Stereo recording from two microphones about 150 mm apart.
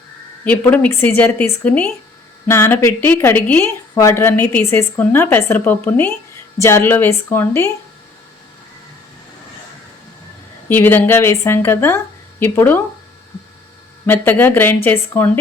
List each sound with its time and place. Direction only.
0.4 s speech: 10° left (ahead or behind)
10.7 s speech: 15° left (ahead or behind)
14.1 s speech: 15° left (ahead or behind)